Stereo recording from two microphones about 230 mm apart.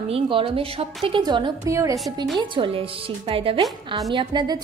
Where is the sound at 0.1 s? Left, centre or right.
Right.